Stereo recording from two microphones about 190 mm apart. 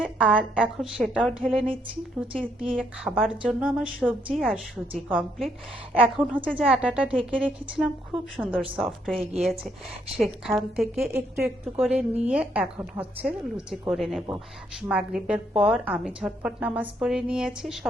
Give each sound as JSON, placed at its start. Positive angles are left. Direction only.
{"t": 0.0, "sound": "a woman's voice", "side_deg": -5}
{"t": 1.5, "sound": "speech", "side_deg": -30}
{"t": 2.2, "sound": "a woman's voice", "side_deg": -5}